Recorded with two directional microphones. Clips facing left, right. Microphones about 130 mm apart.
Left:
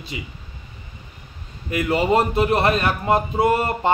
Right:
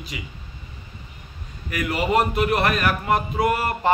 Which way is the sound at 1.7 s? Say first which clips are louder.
Left 3 dB; 25° left (ahead or behind).